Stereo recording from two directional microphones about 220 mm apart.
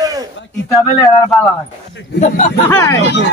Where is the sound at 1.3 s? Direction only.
Centre (ahead or behind).